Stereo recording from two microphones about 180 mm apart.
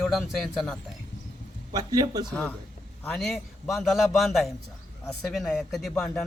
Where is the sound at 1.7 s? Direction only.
20° right (ahead or behind).